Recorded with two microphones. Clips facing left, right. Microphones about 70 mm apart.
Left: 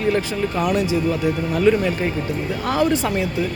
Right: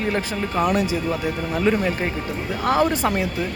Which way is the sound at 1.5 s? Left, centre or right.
Right.